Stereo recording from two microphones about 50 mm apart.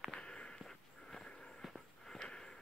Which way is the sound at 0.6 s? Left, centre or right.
Centre.